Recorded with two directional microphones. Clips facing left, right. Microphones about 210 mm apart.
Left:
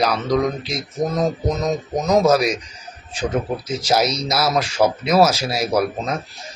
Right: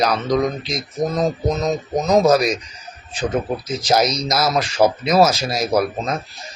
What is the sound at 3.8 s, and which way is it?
Speech, 5° left (ahead or behind).